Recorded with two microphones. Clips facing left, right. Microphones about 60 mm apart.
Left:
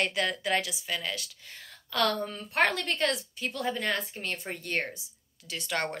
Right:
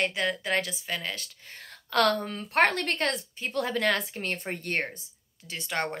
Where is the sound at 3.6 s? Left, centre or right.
Right.